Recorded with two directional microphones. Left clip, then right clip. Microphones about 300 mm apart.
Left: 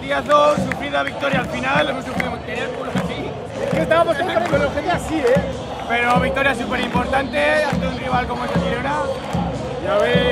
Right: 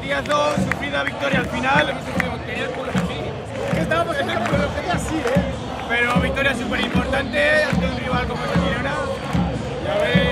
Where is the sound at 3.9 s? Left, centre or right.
Left.